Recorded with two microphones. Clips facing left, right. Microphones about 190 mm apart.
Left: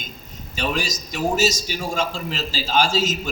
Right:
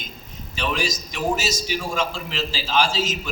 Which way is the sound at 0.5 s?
40° left (ahead or behind).